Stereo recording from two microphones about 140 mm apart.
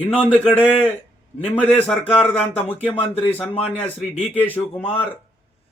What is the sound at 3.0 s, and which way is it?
Speech, 45° left (ahead or behind).